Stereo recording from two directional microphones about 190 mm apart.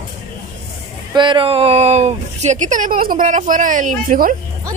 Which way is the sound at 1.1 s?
25° right (ahead or behind).